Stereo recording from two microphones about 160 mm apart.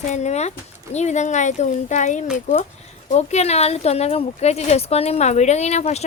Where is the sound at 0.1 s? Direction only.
45° left (ahead or behind).